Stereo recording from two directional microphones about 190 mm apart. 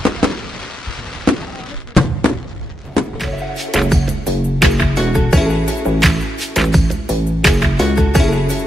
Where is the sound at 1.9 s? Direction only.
Centre (ahead or behind).